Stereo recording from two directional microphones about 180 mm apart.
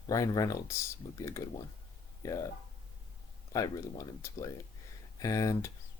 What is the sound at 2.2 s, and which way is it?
Speech, 20° left (ahead or behind).